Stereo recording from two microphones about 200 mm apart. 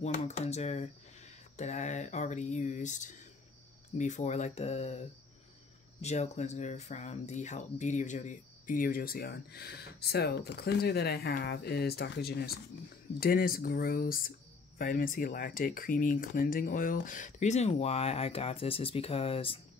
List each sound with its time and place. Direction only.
0.0 s speech: 35° left (ahead or behind)